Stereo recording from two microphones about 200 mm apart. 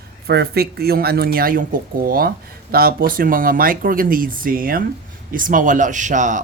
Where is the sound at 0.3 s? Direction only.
55° right (ahead or behind).